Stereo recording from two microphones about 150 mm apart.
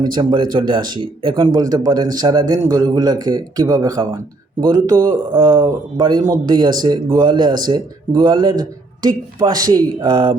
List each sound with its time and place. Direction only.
0.0 s speech: 30° right (ahead or behind)